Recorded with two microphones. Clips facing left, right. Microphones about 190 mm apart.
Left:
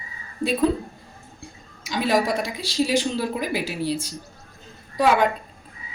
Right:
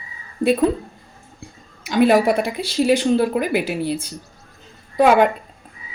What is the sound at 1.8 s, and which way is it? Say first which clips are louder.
A woman's voice: right 7 dB; 60° right (ahead or behind).